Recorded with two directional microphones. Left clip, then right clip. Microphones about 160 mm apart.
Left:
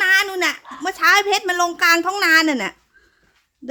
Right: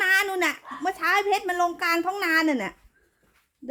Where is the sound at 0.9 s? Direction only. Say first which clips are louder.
Left 8 dB; 20° left (ahead or behind).